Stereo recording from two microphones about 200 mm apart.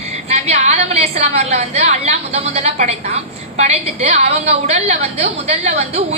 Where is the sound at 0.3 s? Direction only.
30° right (ahead or behind).